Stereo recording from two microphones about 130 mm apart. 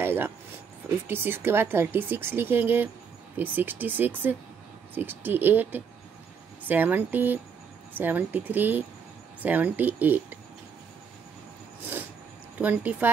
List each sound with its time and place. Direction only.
0.0 s a sound: 15° right (ahead or behind)
0.8 s speech: 15° right (ahead or behind)
12.5 s speech: 10° right (ahead or behind)